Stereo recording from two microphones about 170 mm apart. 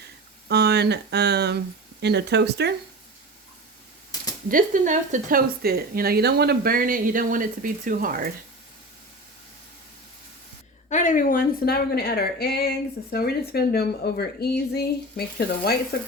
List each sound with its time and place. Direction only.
0.4 s speech: 75° right (ahead or behind)
4.4 s speech: 50° right (ahead or behind)
10.8 s speech: 45° left (ahead or behind); by 16.0 s 65° left (ahead or behind)